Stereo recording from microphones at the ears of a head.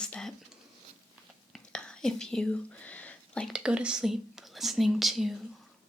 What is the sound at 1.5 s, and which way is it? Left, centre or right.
Whispering, centre.